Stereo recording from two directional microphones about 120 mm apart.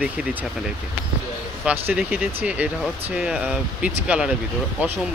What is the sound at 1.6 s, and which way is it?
Speech, 10° right (ahead or behind).